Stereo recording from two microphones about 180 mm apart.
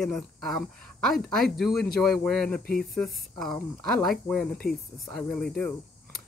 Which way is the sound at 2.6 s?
55° left (ahead or behind).